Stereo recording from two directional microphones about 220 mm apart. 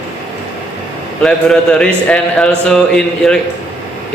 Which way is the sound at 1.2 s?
5° left (ahead or behind).